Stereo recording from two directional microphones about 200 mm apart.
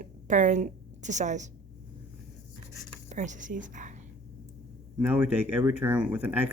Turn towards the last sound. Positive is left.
turn(degrees=-10)  # may be behind; listen again after turning